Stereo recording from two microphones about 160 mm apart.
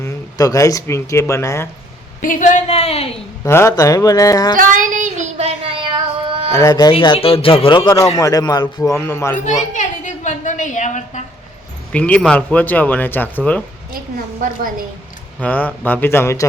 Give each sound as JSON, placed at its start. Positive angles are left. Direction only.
{"t": 0.0, "sound": "speech", "side_deg": 20}
{"t": 2.2, "sound": "a woman's voice", "side_deg": 55}
{"t": 3.4, "sound": "a man's voice", "side_deg": 15}
{"t": 4.5, "sound": "child singing", "side_deg": -55}
{"t": 6.6, "sound": "a man's voice", "side_deg": 25}
{"t": 9.7, "sound": "a sound", "side_deg": 50}
{"t": 11.9, "sound": "speech", "side_deg": 10}
{"t": 14.4, "sound": "a woman's voice", "side_deg": -60}
{"t": 15.4, "sound": "speech", "side_deg": 10}